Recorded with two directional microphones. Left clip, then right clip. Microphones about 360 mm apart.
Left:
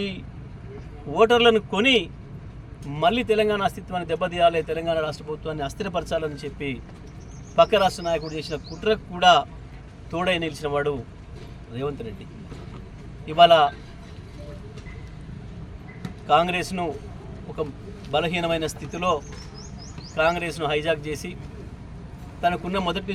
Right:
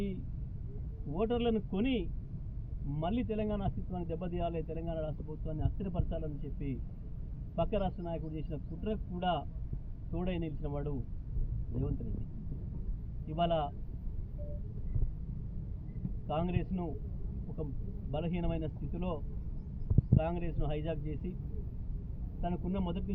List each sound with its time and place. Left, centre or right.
1.1 s speech: centre
13.2 s speech: left
16.2 s speech: left
18.1 s speech: left
22.4 s speech: left